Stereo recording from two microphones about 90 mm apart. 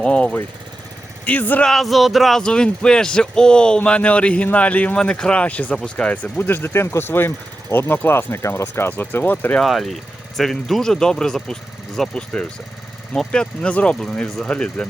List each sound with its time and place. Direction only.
0.0 s speech: 10° left (ahead or behind)
1.6 s speech: centre (ahead or behind); by 9.6 s 20° left (ahead or behind)
9.6 s speech: centre (ahead or behind)